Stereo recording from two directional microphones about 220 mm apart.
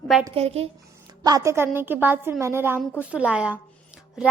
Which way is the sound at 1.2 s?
15° right (ahead or behind).